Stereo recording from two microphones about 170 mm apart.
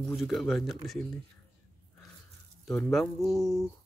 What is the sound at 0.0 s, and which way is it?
Speech, centre (ahead or behind).